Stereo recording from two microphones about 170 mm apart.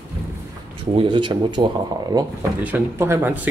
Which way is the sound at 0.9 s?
30° right (ahead or behind).